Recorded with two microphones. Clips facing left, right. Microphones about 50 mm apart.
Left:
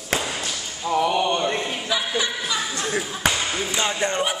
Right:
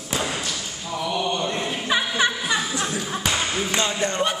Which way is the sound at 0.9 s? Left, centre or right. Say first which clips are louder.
Left 5 dB; left.